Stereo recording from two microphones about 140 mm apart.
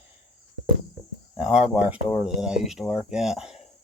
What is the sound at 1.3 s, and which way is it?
Speech, 5° right (ahead or behind).